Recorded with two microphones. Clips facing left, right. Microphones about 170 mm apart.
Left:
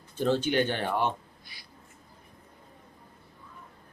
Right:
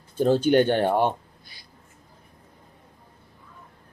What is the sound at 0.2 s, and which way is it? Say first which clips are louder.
Speech: right 7 dB; 45° right (ahead or behind).